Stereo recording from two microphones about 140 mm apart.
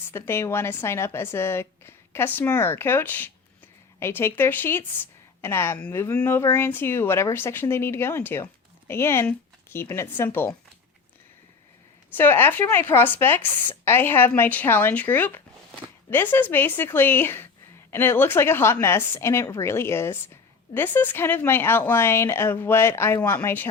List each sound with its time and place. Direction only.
0.1 s speech: 20° left (ahead or behind)
12.1 s speech: 15° left (ahead or behind)